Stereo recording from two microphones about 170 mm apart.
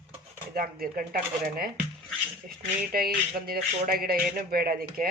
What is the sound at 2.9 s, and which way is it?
Speech, 60° right (ahead or behind).